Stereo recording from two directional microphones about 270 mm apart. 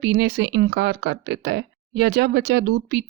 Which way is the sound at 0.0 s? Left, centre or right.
Right.